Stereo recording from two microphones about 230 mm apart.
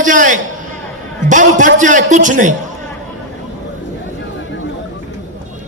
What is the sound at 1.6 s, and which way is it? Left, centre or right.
Speech, right.